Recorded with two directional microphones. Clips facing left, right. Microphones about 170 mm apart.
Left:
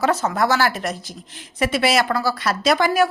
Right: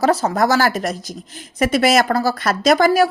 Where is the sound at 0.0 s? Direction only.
35° right (ahead or behind).